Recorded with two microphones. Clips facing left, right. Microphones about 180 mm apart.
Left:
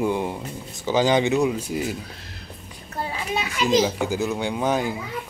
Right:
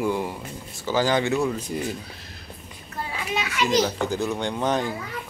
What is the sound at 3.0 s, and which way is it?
Children playing, 30° left (ahead or behind).